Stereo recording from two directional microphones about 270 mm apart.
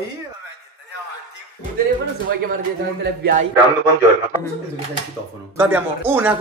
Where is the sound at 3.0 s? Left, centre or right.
Right.